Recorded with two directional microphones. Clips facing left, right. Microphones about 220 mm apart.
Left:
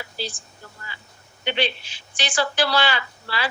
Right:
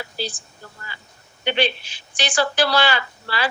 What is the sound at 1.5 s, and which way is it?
Speech, 45° right (ahead or behind).